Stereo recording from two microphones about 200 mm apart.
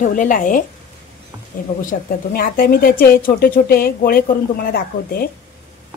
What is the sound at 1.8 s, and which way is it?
A woman's voice, 45° left (ahead or behind).